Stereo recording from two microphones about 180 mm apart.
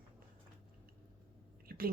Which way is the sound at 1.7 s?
55° right (ahead or behind).